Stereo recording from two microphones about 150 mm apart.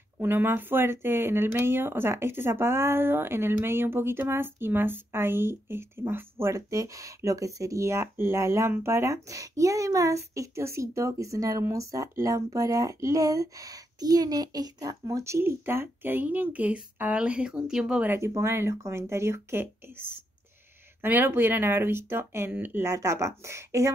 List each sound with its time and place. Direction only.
0.2 s speech: 15° right (ahead or behind)
21.0 s speech: 15° right (ahead or behind)